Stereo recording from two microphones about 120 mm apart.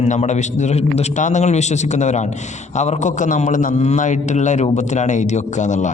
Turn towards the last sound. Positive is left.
turn(degrees=90)